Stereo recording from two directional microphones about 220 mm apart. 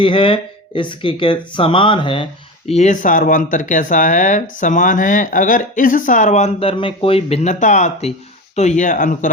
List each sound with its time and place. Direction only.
0.0 s speech: 25° left (ahead or behind)